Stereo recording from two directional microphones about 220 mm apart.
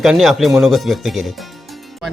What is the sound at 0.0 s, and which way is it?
A man's voice, centre (ahead or behind).